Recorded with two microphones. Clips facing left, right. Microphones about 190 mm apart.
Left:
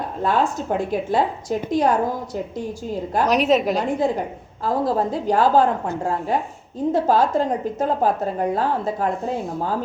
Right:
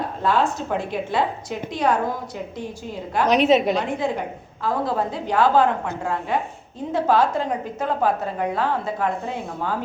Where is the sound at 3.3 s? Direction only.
Centre (ahead or behind).